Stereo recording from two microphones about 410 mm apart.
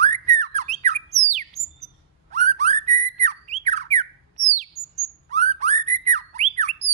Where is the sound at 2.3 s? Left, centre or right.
Centre.